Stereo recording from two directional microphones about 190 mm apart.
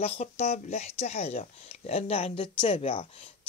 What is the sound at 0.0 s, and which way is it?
Speech, 35° left (ahead or behind).